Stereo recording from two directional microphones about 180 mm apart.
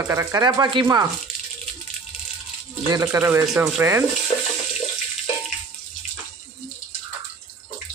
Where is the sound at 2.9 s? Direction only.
15° right (ahead or behind).